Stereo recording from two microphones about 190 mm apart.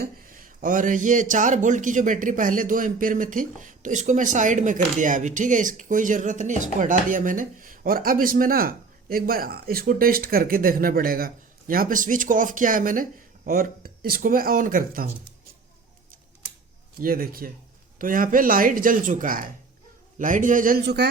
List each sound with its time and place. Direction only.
0.0 s speech: 45° right (ahead or behind)
17.0 s speech: 50° right (ahead or behind)